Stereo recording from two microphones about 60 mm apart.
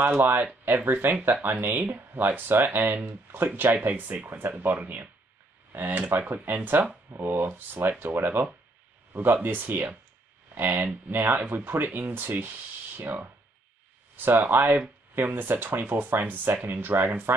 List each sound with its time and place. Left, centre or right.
0.2 s speech: right